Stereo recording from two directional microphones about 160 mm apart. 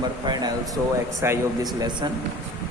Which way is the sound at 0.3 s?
25° right (ahead or behind).